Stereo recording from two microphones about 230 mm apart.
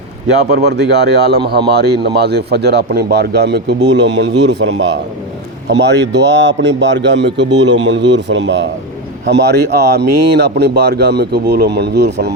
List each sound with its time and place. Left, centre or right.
0.5 s speech: right
5.6 s speech: right